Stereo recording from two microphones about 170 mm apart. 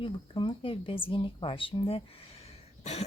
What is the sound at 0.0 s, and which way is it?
Speech, 30° left (ahead or behind).